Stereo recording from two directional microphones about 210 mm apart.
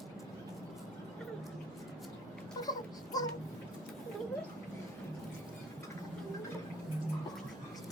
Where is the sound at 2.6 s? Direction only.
20° left (ahead or behind).